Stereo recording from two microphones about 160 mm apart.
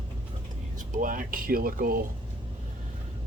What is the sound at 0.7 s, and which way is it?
Speech, 55° right (ahead or behind).